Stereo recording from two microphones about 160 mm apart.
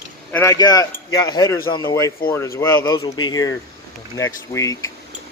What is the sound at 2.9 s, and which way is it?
Speech, 25° left (ahead or behind).